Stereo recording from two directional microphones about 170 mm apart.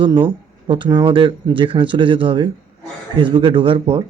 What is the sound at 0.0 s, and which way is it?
Speech, 25° right (ahead or behind).